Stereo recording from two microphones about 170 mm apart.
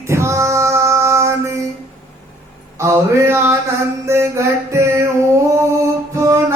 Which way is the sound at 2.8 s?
15° right (ahead or behind).